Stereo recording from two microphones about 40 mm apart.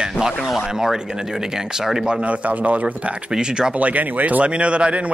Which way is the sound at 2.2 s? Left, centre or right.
Right.